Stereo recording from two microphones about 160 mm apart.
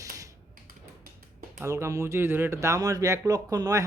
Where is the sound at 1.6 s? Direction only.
15° right (ahead or behind).